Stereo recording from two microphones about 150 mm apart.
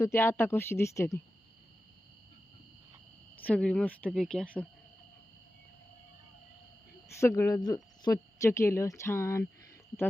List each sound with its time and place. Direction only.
0.0 s speech: 15° left (ahead or behind)
3.4 s speech: 5° left (ahead or behind)
7.2 s speech: 20° left (ahead or behind)